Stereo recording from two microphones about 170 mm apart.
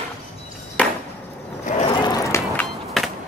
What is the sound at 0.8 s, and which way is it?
Chop, 10° left (ahead or behind).